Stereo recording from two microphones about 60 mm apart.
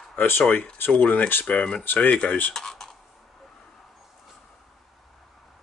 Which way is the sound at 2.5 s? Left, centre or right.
Centre.